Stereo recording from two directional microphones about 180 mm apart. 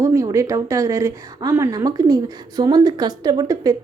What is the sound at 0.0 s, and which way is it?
A woman's voice, 15° right (ahead or behind).